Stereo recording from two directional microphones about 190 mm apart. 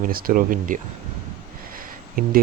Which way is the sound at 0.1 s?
50° right (ahead or behind).